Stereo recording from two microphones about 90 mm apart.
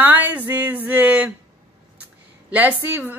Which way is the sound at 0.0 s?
20° right (ahead or behind).